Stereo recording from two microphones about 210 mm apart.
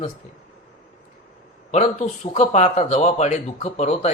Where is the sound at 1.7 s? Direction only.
30° left (ahead or behind).